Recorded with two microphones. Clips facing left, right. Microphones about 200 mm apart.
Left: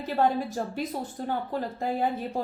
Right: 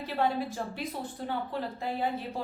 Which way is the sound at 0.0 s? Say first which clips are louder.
Left 4 dB; 45° left (ahead or behind).